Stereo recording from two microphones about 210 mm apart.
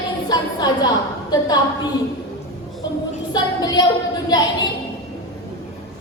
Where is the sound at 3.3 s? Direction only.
20° left (ahead or behind).